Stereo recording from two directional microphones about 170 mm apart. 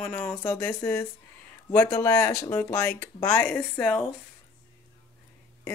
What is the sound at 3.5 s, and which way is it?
Speech, 5° left (ahead or behind).